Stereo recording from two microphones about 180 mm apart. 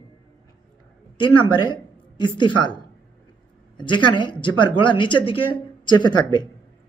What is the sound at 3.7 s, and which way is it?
Speech, 25° left (ahead or behind).